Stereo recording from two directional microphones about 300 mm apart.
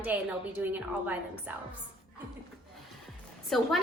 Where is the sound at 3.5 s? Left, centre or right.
Centre.